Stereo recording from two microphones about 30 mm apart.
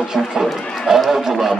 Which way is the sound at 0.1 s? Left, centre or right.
Centre.